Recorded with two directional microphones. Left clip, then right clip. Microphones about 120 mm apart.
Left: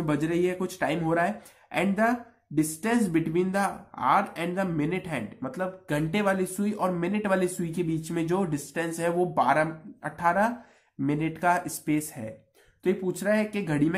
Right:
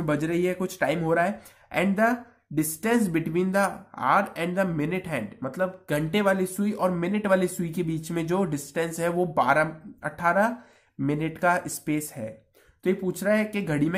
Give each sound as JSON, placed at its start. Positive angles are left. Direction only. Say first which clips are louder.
{"t": 0.0, "sound": "speech", "louder": "right 1 dB", "side_deg": -30}